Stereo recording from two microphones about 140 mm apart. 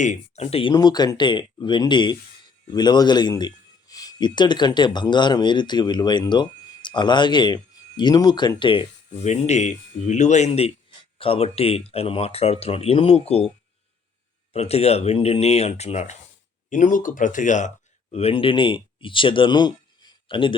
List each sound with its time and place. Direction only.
0.0 s speech: 55° left (ahead or behind)
0.7 s speech: 30° left (ahead or behind)
9.1 s speech: 55° left (ahead or behind)
14.5 s speech: 50° left (ahead or behind)
16.6 s speech: 65° left (ahead or behind)
18.1 s speech: 45° left (ahead or behind)